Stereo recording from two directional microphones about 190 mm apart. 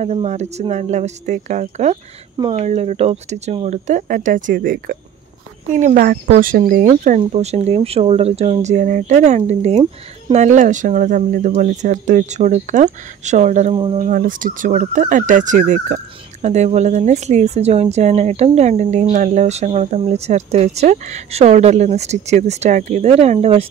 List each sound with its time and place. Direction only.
0.0 s speech: 35° right (ahead or behind)
7.1 s speech: 35° right (ahead or behind)